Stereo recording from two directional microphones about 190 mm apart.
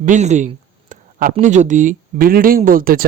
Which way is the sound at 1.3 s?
40° right (ahead or behind).